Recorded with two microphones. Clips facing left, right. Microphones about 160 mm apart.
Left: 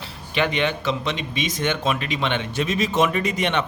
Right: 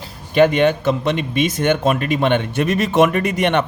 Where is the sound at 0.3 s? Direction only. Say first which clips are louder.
Right 9 dB; 45° right (ahead or behind).